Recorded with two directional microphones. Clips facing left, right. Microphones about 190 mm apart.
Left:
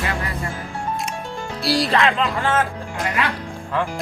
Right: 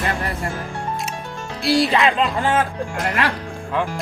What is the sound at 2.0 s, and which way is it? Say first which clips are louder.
Speech: right 1 dB; 15° right (ahead or behind).